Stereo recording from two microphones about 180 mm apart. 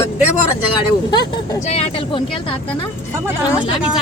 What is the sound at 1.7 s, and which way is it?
Speech, 35° left (ahead or behind).